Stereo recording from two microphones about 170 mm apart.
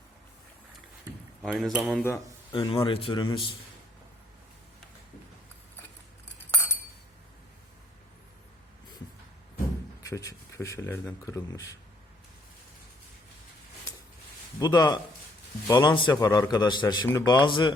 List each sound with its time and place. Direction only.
1.4 s speech: centre (ahead or behind)
2.5 s a man's voice: 30° left (ahead or behind)
10.0 s speech: 20° left (ahead or behind)
14.6 s a man's voice: 25° left (ahead or behind)